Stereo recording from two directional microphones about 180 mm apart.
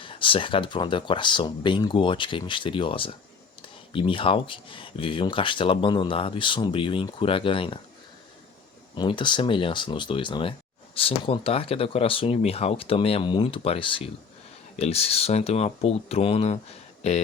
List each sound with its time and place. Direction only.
0.0 s speech: 30° left (ahead or behind)
9.0 s speech: 25° left (ahead or behind)